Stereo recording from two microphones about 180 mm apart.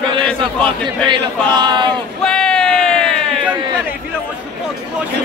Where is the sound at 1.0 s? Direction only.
25° right (ahead or behind).